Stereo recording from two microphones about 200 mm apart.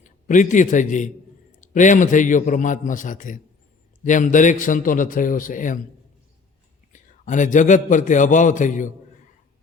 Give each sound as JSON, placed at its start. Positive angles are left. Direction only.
{"t": 0.0, "sound": "a man's voice", "side_deg": 40}
{"t": 6.9, "sound": "a man's voice", "side_deg": 40}